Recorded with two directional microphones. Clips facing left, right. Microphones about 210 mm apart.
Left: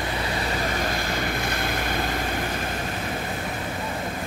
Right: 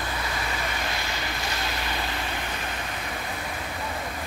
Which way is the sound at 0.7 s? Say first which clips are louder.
Left 5 dB; 50° left (ahead or behind).